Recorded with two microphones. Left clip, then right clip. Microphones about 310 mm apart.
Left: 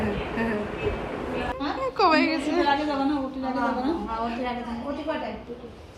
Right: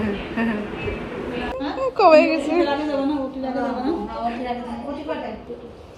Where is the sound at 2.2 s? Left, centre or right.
Left.